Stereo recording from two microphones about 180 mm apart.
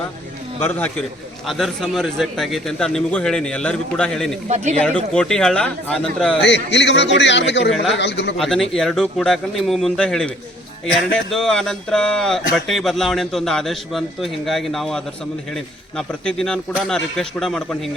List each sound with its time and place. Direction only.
0.6 s a man's voice: 10° left (ahead or behind)
4.4 s speech: 40° right (ahead or behind)
5.1 s speech: 5° left (ahead or behind)
6.4 s a man's voice: 75° left (ahead or behind)
8.4 s speech: centre (ahead or behind)